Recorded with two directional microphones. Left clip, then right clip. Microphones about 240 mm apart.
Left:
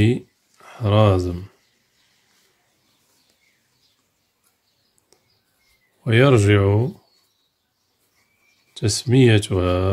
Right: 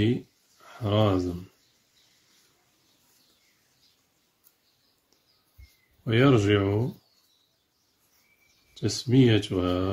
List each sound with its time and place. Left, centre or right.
0.7 s speech: left
6.0 s speech: left
8.7 s speech: left